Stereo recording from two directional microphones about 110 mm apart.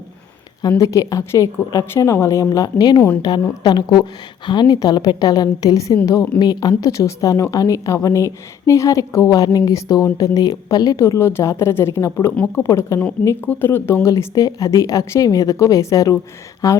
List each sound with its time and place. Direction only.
0.8 s a woman's voice: 30° left (ahead or behind)